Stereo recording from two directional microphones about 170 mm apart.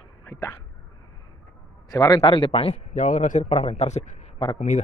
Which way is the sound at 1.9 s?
25° left (ahead or behind).